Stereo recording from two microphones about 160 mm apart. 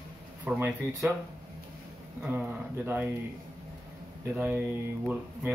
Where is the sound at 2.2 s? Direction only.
15° right (ahead or behind).